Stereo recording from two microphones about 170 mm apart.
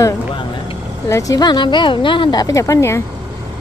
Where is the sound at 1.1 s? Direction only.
20° left (ahead or behind).